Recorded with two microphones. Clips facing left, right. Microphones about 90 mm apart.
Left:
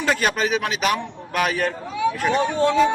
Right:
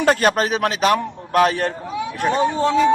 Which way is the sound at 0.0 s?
45° right (ahead or behind).